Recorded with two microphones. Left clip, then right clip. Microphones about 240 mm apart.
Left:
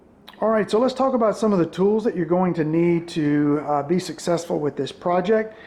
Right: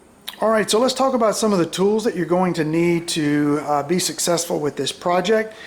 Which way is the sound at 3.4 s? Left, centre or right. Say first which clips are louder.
Right 2 dB; centre.